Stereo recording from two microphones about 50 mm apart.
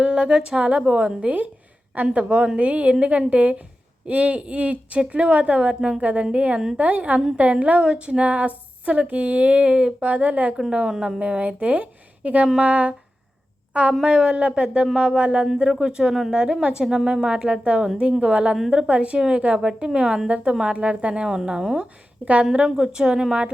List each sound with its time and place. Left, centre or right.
0.0 s a woman's voice: centre
10.8 s a woman's voice: centre
11.2 s a woman's voice: right
14.0 s a woman's voice: centre
19.5 s a woman's voice: centre
22.2 s speech: right
22.5 s a woman's voice: centre